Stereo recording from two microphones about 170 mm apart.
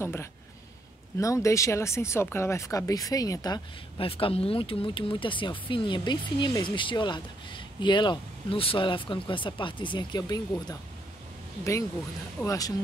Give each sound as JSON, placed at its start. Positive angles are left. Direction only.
{"t": 0.0, "sound": "speech", "side_deg": 15}
{"t": 12.4, "sound": "speech", "side_deg": 20}